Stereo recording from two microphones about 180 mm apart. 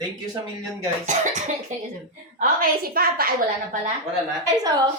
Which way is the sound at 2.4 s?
55° right (ahead or behind).